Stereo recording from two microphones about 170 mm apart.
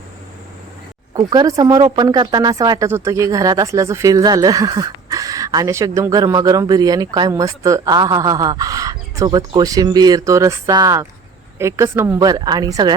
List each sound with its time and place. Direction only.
1.1 s speech: 25° right (ahead or behind)